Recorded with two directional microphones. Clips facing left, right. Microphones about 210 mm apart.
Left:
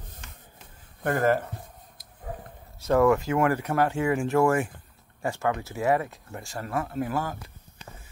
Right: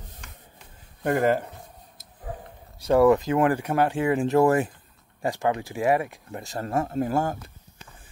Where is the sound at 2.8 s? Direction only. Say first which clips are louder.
Right 3 dB; 15° right (ahead or behind); by 4.6 s 35° right (ahead or behind).